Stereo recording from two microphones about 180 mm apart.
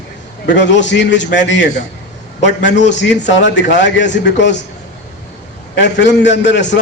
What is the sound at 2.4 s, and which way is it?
A man's voice, 85° left.